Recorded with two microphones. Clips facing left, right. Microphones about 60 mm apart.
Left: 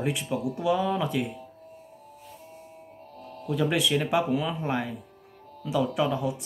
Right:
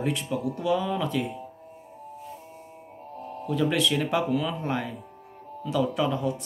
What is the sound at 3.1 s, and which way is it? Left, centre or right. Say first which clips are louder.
Music: right 6 dB; right.